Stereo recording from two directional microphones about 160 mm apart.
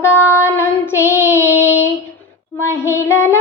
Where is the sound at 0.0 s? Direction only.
15° left (ahead or behind).